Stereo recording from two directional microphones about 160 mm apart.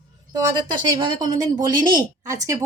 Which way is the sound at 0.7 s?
25° right (ahead or behind).